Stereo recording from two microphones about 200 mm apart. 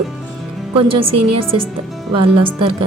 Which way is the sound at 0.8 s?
25° right (ahead or behind).